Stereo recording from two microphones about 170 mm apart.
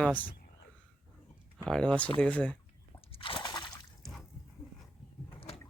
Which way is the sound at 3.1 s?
30° left (ahead or behind).